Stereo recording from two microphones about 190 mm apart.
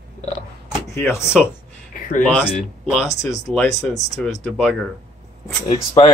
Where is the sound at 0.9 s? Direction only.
15° left (ahead or behind).